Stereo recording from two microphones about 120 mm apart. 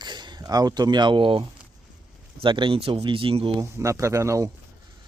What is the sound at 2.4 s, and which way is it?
Speech, 45° right (ahead or behind).